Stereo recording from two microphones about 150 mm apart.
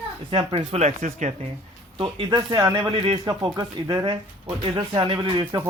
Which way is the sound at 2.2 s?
25° right (ahead or behind).